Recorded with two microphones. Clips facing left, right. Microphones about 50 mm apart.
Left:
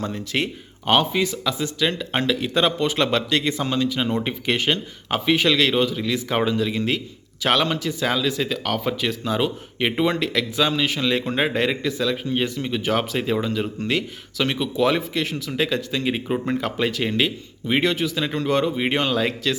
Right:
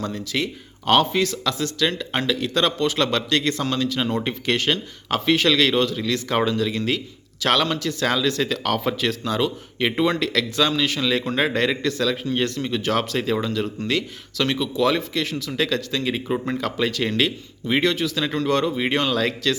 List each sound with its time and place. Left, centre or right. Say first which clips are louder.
0.0 s speech: left 1 dB; left
0.9 s speech: right 1 dB; centre
9.2 s speech: even; centre